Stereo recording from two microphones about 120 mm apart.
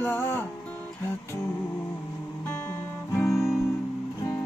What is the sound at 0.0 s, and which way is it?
Music, 20° left (ahead or behind).